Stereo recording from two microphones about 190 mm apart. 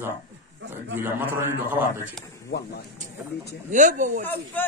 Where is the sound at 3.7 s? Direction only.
40° right (ahead or behind).